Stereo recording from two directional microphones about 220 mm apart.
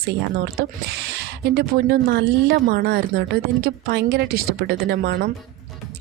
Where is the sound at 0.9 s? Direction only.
50° right (ahead or behind).